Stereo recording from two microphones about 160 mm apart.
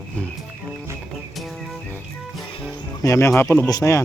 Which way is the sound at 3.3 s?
15° left (ahead or behind).